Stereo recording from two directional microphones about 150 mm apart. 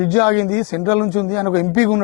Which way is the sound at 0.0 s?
15° left (ahead or behind).